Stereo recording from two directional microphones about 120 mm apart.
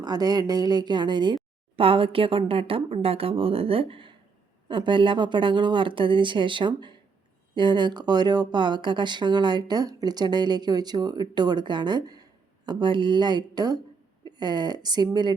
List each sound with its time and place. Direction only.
0.0 s a woman's voice: 35° right (ahead or behind)